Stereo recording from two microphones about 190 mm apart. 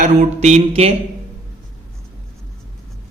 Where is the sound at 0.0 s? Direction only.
40° right (ahead or behind).